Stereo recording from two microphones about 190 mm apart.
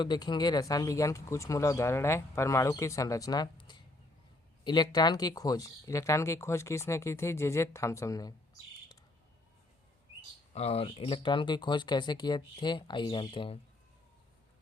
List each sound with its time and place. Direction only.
0.0 s speech: 25° left (ahead or behind)
10.5 s speech: 35° left (ahead or behind)